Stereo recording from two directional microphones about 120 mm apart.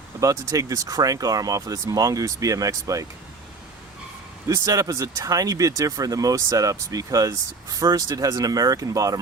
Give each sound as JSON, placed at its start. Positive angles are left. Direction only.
{"t": 0.2, "sound": "speech", "side_deg": -30}
{"t": 4.4, "sound": "speech", "side_deg": -30}